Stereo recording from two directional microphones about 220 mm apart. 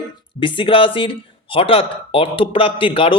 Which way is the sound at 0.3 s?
20° left (ahead or behind).